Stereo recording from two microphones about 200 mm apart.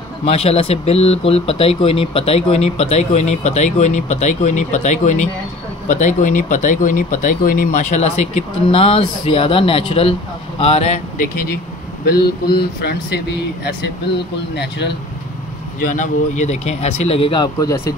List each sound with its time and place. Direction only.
0.2 s speech: 30° left (ahead or behind)
12.1 s speech: 55° left (ahead or behind)
14.5 s speech: 55° left (ahead or behind)
15.8 s speech: 40° left (ahead or behind); by 17.9 s 15° left (ahead or behind)